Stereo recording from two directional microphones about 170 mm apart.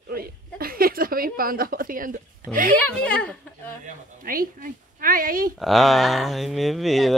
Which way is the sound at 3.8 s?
55° right (ahead or behind).